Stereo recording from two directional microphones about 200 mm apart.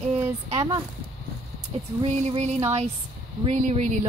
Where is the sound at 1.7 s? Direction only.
35° right (ahead or behind).